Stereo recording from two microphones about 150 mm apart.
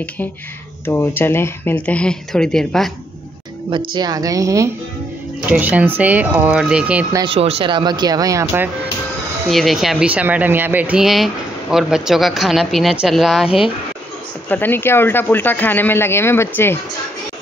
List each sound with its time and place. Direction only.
0.8 s speech: 15° left (ahead or behind)
3.9 s speech: 25° right (ahead or behind)
5.5 s speech: 10° right (ahead or behind)
7.2 s speech: 40° right (ahead or behind); by 8.6 s 20° right (ahead or behind)
9.5 s speech: centre (ahead or behind)
14.5 s speech: 15° left (ahead or behind)